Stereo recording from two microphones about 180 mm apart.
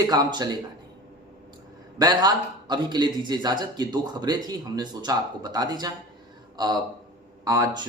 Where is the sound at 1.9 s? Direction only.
20° right (ahead or behind).